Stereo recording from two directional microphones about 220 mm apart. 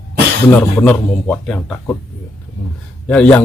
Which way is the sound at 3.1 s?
5° left (ahead or behind).